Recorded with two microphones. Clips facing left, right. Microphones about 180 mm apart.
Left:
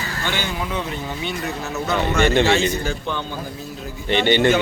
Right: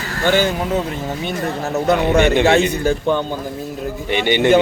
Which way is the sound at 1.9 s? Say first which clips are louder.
Right 4 dB; 60° right (ahead or behind).